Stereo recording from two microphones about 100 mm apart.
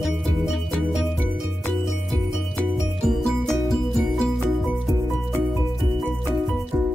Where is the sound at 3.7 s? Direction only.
Centre (ahead or behind).